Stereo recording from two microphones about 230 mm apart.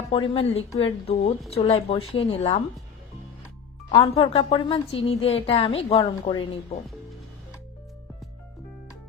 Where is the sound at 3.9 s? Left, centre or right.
Left.